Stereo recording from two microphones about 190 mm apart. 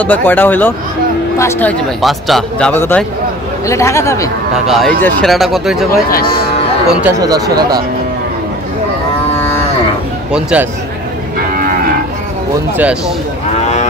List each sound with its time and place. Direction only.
0.0 s speech: 10° left (ahead or behind)
4.6 s speech: centre (ahead or behind)
6.0 s speech: 50° left (ahead or behind)
6.9 s speech: 5° right (ahead or behind)
7.2 s speech: 20° right (ahead or behind)
10.3 s speech: 5° right (ahead or behind)
11.5 s livestock: 50° right (ahead or behind)